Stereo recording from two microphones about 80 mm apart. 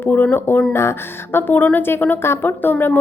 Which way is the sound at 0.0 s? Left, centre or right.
Left.